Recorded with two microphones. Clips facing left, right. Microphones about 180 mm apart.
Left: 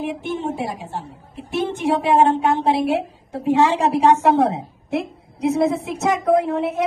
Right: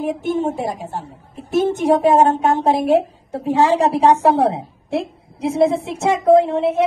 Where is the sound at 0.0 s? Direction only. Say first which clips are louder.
Right 5 dB; 40° right (ahead or behind).